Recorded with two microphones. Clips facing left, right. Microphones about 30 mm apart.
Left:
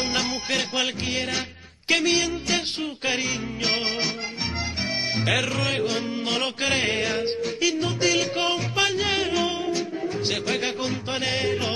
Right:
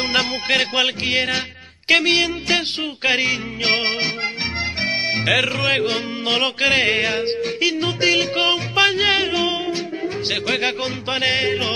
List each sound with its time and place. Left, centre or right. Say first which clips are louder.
0.0 s music: right 6 dB; right